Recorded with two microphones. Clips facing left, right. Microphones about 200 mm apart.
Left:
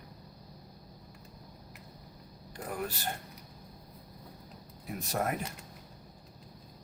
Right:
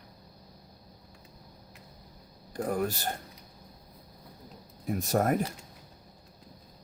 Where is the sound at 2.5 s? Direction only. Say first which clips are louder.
Right 8 dB; 45° right (ahead or behind).